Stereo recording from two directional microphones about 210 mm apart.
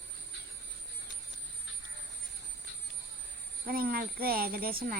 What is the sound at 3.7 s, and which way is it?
A child's voice, 45° right (ahead or behind).